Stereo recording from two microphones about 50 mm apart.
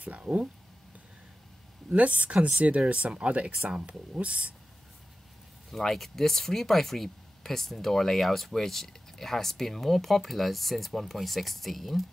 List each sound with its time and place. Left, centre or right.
0.0 s speech: right
2.0 s speech: right
5.7 s speech: centre